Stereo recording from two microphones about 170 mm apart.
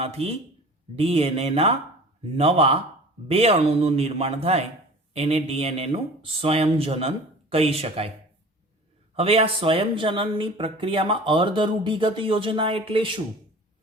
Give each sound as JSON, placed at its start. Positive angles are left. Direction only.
{"t": 0.0, "sound": "speech", "side_deg": -35}
{"t": 9.1, "sound": "speech", "side_deg": -35}